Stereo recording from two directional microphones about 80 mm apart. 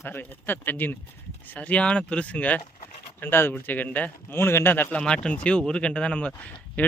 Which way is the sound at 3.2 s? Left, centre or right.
Left.